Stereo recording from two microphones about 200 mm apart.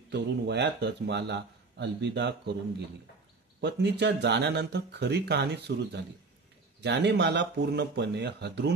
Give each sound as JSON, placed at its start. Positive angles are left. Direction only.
{"t": 0.1, "sound": "speech", "side_deg": -60}
{"t": 3.6, "sound": "speech", "side_deg": -55}